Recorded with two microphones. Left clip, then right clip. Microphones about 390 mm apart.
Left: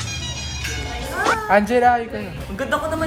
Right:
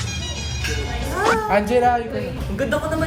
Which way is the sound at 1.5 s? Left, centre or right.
Centre.